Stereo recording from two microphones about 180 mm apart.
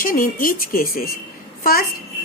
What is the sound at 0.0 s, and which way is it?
A woman's voice, 50° left (ahead or behind).